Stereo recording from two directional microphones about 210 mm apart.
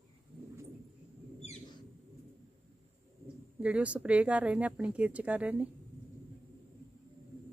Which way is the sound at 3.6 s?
5° right (ahead or behind).